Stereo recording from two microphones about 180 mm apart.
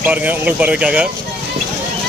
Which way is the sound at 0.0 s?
10° right (ahead or behind).